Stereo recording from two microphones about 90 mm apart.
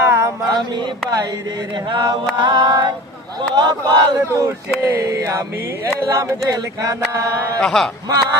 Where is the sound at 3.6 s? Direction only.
50° right (ahead or behind).